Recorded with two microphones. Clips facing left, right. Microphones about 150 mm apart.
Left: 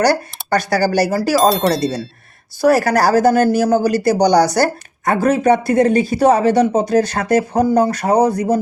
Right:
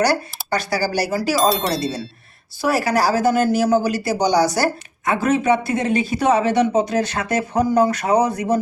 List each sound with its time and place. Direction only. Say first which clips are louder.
0.0 s speech: left 3 dB; 45° left (ahead or behind)
1.4 s speech: left 5 dB; centre (ahead or behind)
2.6 s speech: left 5 dB; 45° left (ahead or behind)